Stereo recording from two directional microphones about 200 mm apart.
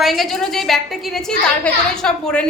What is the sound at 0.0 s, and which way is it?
A woman's voice, centre (ahead or behind).